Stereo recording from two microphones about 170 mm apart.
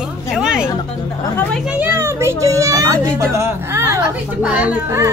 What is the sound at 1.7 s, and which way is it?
Speech, 10° right (ahead or behind).